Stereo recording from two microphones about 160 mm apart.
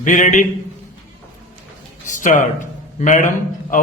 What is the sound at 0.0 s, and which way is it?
Speech, 50° left (ahead or behind).